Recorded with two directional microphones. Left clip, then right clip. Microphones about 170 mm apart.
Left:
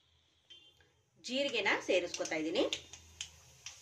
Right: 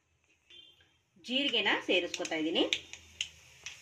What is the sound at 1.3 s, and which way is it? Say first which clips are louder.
Speech: right 3 dB; 30° right (ahead or behind).